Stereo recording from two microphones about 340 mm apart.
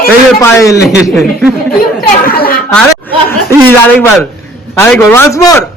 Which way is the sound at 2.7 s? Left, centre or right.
Centre.